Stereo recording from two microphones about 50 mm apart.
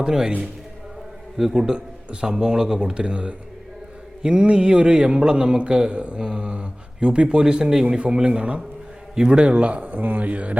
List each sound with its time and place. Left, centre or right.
0.0 s a man's voice: centre
1.4 s a man's voice: centre; by 10.6 s right